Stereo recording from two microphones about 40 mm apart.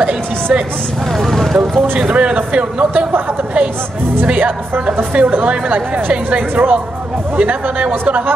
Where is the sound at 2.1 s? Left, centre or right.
Right.